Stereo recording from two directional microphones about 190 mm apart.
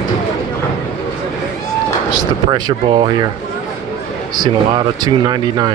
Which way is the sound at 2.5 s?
25° right (ahead or behind).